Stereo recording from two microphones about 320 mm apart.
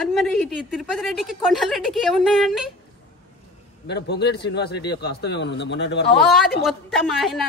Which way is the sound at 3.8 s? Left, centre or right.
Left.